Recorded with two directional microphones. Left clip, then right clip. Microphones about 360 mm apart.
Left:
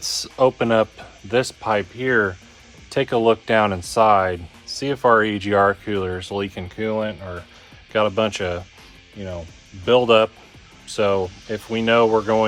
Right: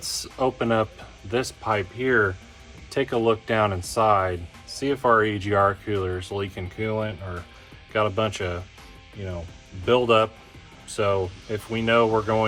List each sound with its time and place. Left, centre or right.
0.0 s speech: left
9.8 s speech: left